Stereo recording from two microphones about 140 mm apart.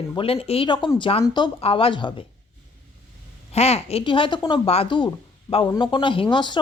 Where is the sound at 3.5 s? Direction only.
50° left (ahead or behind).